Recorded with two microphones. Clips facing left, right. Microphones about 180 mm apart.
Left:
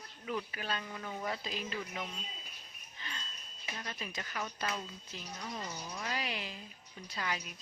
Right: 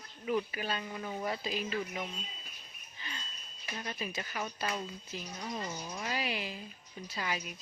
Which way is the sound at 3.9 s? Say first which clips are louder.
Right 6 dB; 10° right (ahead or behind).